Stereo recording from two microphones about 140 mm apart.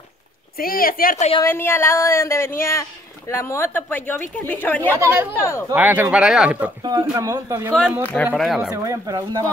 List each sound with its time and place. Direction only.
0.6 s speech: 90° left; by 1.3 s 75° left (ahead or behind)
1.4 s a woman's voice: 15° left (ahead or behind)
4.9 s speech: 20° right (ahead or behind)
5.4 s speech: 20° left (ahead or behind)
5.7 s speech: 10° right (ahead or behind)
6.8 s speech: 30° right (ahead or behind)
8.0 s a woman's voice: 10° left (ahead or behind)
8.4 s speech: 5° right (ahead or behind)
8.8 s speech: 25° right (ahead or behind)